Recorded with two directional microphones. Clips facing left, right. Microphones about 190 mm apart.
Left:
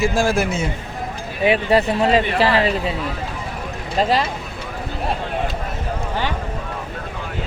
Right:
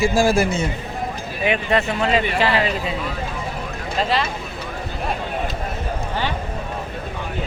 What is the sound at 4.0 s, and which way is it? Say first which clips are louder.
Speech: left 3 dB; 40° left (ahead or behind).